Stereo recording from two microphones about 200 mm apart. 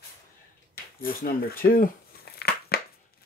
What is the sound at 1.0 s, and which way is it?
Speech, 45° left (ahead or behind).